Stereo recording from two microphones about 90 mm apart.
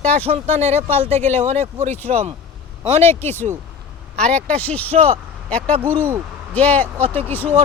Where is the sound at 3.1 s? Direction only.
25° left (ahead or behind).